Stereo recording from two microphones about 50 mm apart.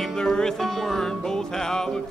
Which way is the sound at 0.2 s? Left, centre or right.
Centre.